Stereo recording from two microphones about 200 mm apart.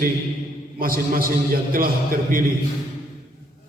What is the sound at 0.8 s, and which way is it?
Speech, 45° right (ahead or behind).